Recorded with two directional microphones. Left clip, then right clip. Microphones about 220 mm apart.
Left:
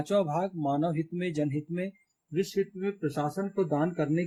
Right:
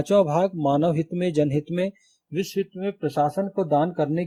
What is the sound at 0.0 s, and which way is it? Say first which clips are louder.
Speech: right 8 dB; 35° right (ahead or behind).